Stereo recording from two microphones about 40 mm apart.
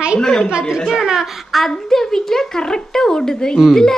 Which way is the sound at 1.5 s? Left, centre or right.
Centre.